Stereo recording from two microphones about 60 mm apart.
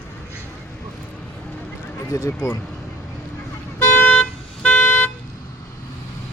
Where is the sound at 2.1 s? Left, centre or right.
Left.